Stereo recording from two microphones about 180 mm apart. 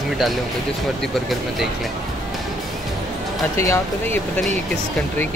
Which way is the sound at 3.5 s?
15° left (ahead or behind).